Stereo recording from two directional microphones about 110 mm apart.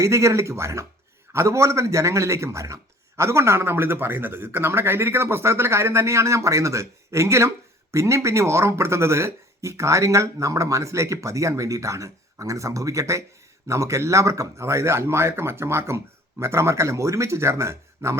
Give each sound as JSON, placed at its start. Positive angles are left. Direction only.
{"t": 0.0, "sound": "speech", "side_deg": -25}